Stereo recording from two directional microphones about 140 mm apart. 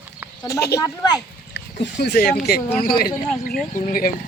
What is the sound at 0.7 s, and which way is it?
Speech, 20° left (ahead or behind).